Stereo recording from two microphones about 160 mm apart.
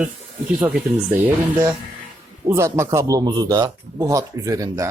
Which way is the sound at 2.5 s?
15° right (ahead or behind).